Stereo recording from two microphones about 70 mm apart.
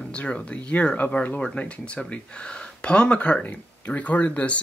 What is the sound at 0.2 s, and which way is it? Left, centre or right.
Speech, centre.